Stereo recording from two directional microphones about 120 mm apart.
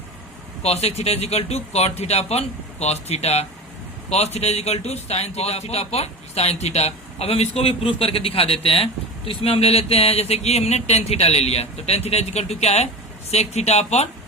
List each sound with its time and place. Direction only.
0.6 s speech: 60° left (ahead or behind)